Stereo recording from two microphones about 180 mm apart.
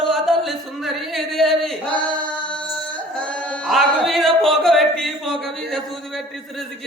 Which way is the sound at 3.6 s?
Centre (ahead or behind).